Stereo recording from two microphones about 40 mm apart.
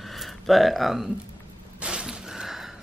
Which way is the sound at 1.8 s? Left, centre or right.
Right.